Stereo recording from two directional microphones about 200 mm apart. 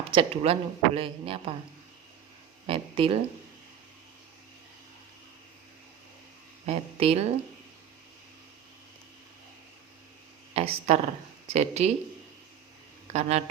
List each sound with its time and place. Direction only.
0.1 s speech: 30° right (ahead or behind)
2.6 s speech: 25° right (ahead or behind)
6.7 s speech: 30° right (ahead or behind)
10.5 s speech: 30° right (ahead or behind)
13.1 s speech: 35° right (ahead or behind)